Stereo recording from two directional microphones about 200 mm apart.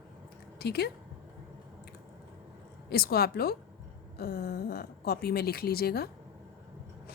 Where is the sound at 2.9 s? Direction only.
50° left (ahead or behind).